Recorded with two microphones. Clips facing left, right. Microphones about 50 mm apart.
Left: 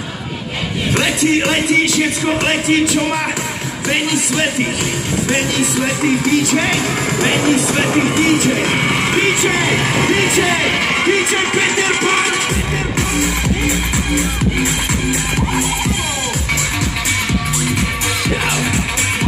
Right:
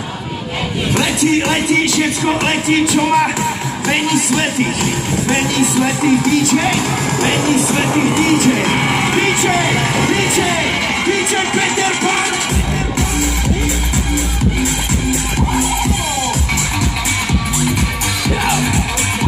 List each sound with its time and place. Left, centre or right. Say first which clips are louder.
0.9 s speech: even; centre
2.2 s music: right 1 dB; centre
5.3 s music: right 3 dB; centre
6.0 s music: right 1 dB; centre